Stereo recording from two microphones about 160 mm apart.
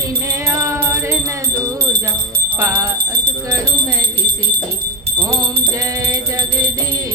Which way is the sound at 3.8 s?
25° right (ahead or behind).